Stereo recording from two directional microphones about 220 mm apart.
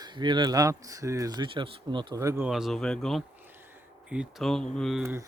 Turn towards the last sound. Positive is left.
turn(degrees=-10)  # may be behind; listen again after turning